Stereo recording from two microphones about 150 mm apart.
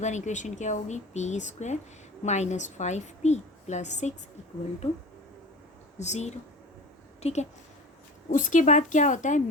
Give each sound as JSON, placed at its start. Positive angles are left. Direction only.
{"t": 0.0, "sound": "a woman's voice", "side_deg": 50}
{"t": 6.0, "sound": "a woman's voice", "side_deg": 50}
{"t": 8.3, "sound": "a woman's voice", "side_deg": 60}